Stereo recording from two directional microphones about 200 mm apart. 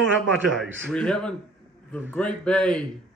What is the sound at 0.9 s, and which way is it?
Speech, 5° left (ahead or behind).